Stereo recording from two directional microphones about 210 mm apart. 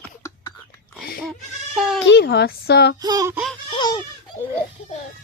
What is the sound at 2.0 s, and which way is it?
Speech, 55° left (ahead or behind).